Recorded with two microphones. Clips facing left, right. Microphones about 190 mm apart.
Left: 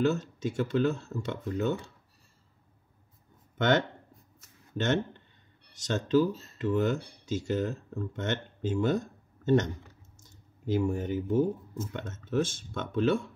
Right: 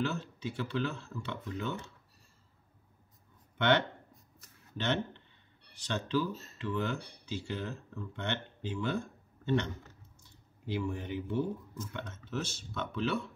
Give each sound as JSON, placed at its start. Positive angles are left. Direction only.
{"t": 0.0, "sound": "speech", "side_deg": 45}
{"t": 3.5, "sound": "speech", "side_deg": 45}